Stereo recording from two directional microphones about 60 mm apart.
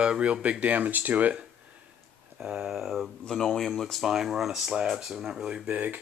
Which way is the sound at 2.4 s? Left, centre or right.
Centre.